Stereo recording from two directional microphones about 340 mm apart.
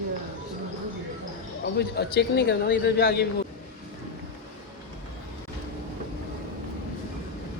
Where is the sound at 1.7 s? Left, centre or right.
Left.